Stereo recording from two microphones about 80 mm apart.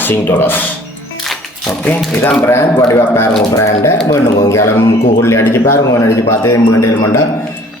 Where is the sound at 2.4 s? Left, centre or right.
Left.